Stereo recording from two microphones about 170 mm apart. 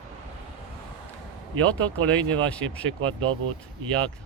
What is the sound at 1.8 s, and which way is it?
Speech, 10° left (ahead or behind).